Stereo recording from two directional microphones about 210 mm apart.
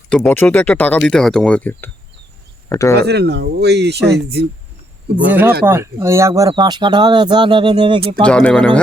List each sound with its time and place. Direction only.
0.1 s speech: 5° left (ahead or behind)
3.0 s speech: 50° right (ahead or behind)
5.6 s speech: 10° right (ahead or behind)
8.2 s speech: 5° left (ahead or behind)